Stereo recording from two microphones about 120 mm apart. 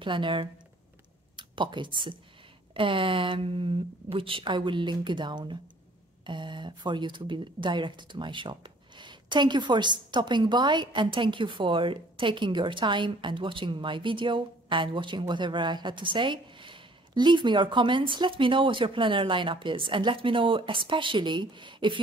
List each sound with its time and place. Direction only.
0.0 s speech: 45° right (ahead or behind)